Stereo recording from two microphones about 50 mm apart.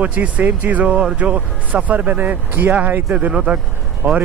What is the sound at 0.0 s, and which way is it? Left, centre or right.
Speech, right.